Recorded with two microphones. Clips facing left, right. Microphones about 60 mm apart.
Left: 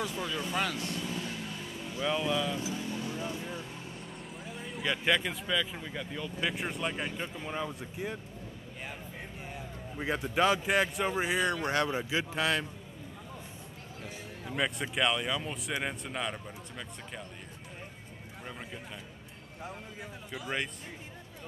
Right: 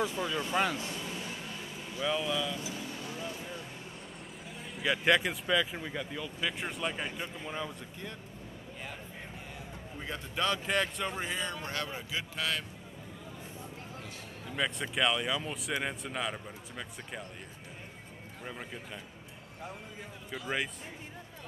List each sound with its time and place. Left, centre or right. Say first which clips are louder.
0.1 s speech: right 2 dB; centre
2.0 s speech: left 1 dB; centre
4.6 s speech: right 1 dB; centre
10.0 s a man's voice: left 6 dB; centre
11.4 s speech: left 7 dB; left
11.9 s a man's voice: left 6 dB; left
14.5 s speech: left 1 dB; centre
18.4 s a man's voice: right 1 dB; centre
20.2 s speech: right 1 dB; centre